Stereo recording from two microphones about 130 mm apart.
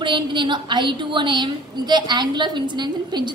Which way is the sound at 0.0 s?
35° right (ahead or behind).